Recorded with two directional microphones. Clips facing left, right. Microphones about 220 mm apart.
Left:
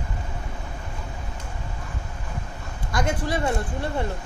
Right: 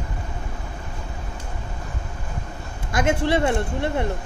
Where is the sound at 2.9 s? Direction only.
25° right (ahead or behind).